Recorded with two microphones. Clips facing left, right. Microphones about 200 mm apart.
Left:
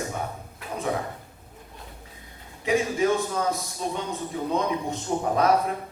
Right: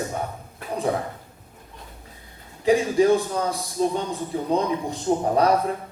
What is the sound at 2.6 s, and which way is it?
A man's voice, 35° right (ahead or behind).